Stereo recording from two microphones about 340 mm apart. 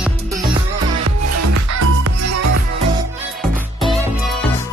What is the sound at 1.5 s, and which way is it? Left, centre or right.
Music, right.